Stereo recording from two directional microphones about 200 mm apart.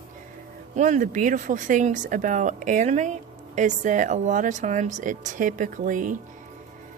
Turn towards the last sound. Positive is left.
turn(degrees=-40)  # may be behind; listen again after turning